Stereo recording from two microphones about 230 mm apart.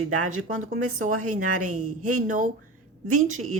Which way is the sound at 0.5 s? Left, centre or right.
Right.